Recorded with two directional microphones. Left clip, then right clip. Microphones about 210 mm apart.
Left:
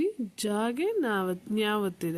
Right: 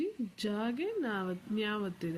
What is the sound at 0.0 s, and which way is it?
Speech, 50° left (ahead or behind).